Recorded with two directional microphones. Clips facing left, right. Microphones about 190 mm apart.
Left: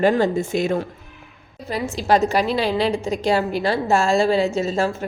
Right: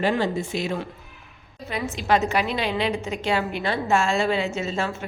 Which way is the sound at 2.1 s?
35° left (ahead or behind).